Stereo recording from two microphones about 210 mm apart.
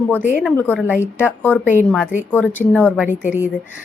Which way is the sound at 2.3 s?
10° left (ahead or behind).